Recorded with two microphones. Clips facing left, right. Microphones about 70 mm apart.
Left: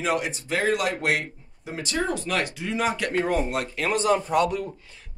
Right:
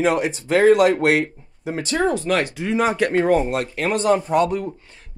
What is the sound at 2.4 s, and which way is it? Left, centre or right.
Speech, right.